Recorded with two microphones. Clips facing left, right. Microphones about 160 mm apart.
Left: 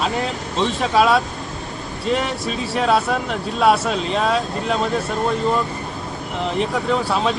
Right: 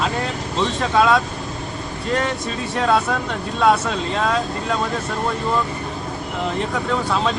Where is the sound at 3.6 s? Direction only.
10° left (ahead or behind).